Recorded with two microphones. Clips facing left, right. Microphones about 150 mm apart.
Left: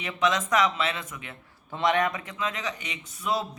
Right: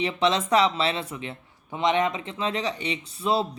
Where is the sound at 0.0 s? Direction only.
30° right (ahead or behind).